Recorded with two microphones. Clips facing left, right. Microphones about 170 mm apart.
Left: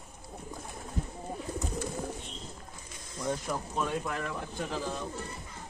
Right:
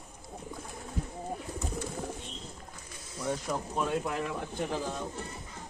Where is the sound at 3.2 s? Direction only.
10° right (ahead or behind).